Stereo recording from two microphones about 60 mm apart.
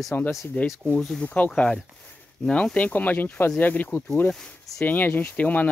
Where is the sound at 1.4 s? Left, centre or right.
Centre.